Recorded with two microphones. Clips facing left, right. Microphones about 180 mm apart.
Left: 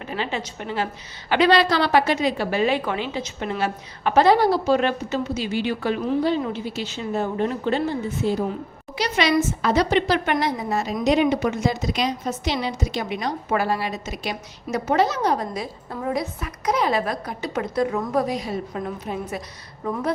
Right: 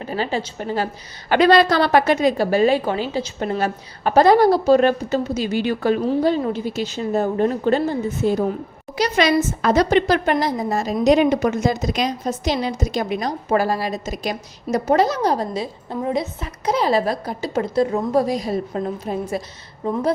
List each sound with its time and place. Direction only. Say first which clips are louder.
0.0 s a woman's voice: right 4 dB; 35° right (ahead or behind)